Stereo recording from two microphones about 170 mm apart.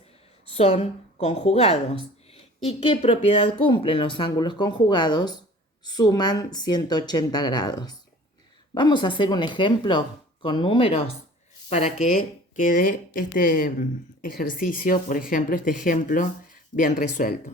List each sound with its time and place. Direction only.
0.5 s a woman's voice: 35° left (ahead or behind)
12.1 s speech: 50° left (ahead or behind)